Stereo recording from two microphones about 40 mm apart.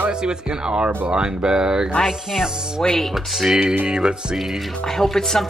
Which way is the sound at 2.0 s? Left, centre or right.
Centre.